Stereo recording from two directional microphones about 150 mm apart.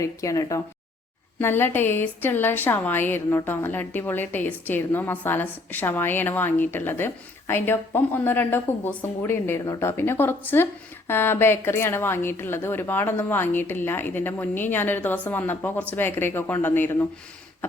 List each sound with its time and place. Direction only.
0.0 s a woman's voice: 20° left (ahead or behind)